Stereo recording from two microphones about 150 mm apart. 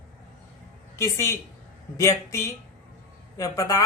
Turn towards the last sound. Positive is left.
turn(degrees=20)  # may be behind; listen again after turning